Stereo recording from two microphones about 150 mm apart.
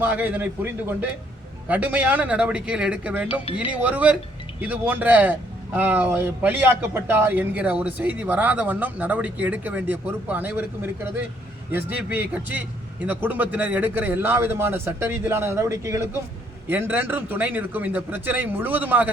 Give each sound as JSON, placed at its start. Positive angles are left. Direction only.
{"t": 0.0, "sound": "a man's voice", "side_deg": -10}
{"t": 3.4, "sound": "speech", "side_deg": 35}
{"t": 3.7, "sound": "a man's voice", "side_deg": -10}